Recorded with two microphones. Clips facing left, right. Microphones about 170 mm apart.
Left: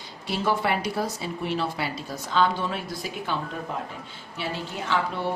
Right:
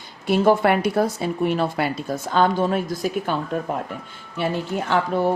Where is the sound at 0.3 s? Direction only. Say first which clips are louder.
Right 8 dB; 50° right (ahead or behind).